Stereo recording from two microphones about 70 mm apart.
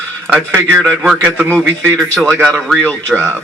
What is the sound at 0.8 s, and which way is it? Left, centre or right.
Speech, centre.